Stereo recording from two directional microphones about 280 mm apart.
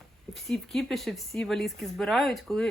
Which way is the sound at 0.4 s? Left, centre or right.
Centre.